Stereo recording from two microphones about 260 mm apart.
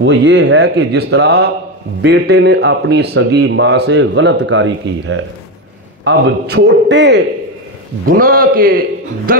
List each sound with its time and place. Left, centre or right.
0.0 s a man's voice: right